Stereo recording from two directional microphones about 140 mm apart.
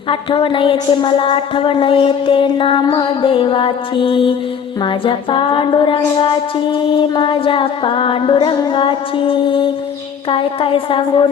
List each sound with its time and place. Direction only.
0.1 s female singing: 35° left (ahead or behind)